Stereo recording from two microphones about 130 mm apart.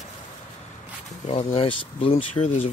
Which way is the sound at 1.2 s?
50° left (ahead or behind).